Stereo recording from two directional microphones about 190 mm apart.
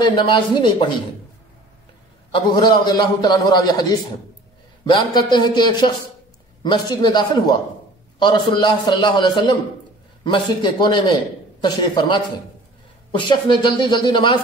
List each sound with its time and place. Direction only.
0.3 s a man's voice: 25° left (ahead or behind)
2.3 s a man's voice: 25° left (ahead or behind)
4.8 s a man's voice: 25° left (ahead or behind)